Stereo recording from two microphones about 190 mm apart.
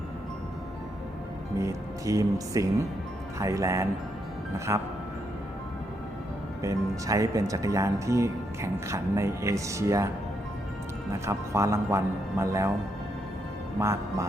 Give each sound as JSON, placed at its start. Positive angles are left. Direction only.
{"t": 1.5, "sound": "speech", "side_deg": -15}
{"t": 6.6, "sound": "speech", "side_deg": -15}
{"t": 11.3, "sound": "speech", "side_deg": -15}
{"t": 13.7, "sound": "speech", "side_deg": -15}